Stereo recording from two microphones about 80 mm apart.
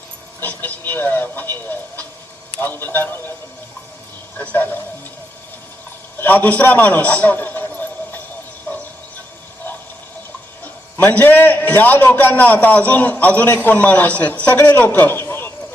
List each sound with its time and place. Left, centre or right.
0.3 s a man's voice: left
4.4 s a man's voice: left
6.1 s a man's voice: left
8.7 s a sound: left
11.1 s a man's voice: left